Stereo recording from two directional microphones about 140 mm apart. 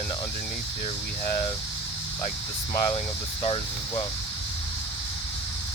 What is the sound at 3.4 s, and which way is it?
Speech, 40° left (ahead or behind).